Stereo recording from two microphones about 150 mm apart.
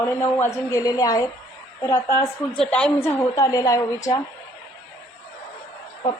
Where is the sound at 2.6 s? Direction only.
5° left (ahead or behind); by 4.2 s 25° left (ahead or behind).